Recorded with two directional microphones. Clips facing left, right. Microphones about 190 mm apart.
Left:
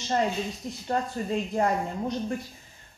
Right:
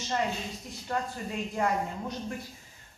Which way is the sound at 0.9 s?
35° left (ahead or behind).